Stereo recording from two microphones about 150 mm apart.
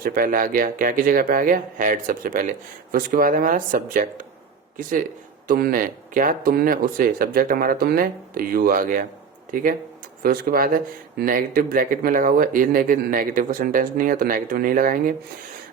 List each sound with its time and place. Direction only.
0.0 s speech: 75° right (ahead or behind)
5.5 s speech: 75° right (ahead or behind)
10.2 s speech: 75° right (ahead or behind)